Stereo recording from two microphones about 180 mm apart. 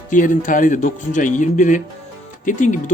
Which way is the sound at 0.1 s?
45° left (ahead or behind).